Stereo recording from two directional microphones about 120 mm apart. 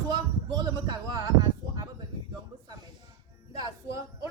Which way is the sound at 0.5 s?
35° right (ahead or behind).